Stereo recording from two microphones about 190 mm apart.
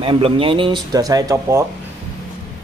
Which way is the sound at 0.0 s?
30° right (ahead or behind).